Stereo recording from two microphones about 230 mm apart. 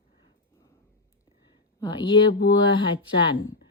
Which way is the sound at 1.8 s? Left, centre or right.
Left.